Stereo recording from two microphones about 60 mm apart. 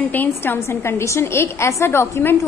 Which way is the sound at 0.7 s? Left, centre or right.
Left.